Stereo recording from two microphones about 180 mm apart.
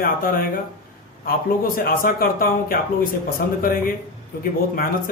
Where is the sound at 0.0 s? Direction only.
50° left (ahead or behind).